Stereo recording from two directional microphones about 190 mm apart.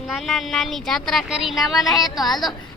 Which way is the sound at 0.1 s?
Centre (ahead or behind).